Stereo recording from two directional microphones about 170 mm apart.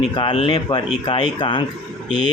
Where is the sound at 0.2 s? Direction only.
30° left (ahead or behind).